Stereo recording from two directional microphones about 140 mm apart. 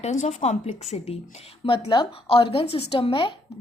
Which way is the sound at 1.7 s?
35° left (ahead or behind).